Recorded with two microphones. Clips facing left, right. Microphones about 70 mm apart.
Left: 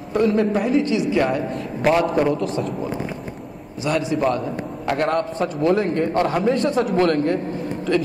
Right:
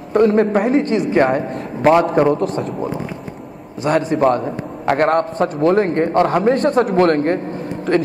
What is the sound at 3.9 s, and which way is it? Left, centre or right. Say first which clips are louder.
A man's voice: right 5 dB; right.